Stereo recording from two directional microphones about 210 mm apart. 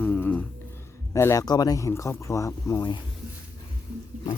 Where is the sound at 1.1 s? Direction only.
15° left (ahead or behind).